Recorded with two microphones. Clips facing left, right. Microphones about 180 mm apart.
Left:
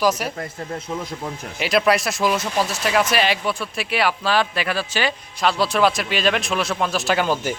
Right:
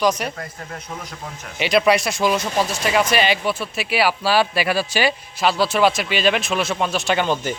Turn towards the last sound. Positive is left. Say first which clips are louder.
# even
turn(degrees=5)  # may be behind; listen again after turning